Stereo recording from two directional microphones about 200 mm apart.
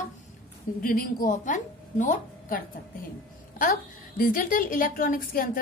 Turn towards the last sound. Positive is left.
turn(degrees=45)  # may be behind; listen again after turning